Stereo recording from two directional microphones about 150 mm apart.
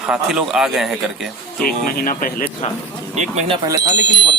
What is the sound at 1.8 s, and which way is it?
Speech, 70° left (ahead or behind).